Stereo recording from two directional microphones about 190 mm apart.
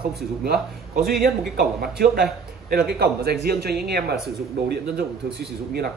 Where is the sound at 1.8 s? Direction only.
55° right (ahead or behind).